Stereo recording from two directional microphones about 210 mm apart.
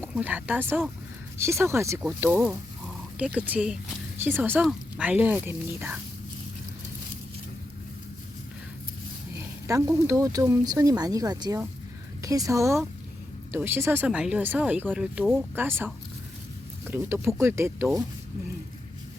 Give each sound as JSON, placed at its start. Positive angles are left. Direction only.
{"t": 0.0, "sound": "speech", "side_deg": -5}
{"t": 9.6, "sound": "speech", "side_deg": -15}